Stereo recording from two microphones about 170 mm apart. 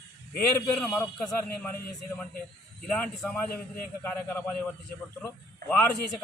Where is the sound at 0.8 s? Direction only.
5° left (ahead or behind).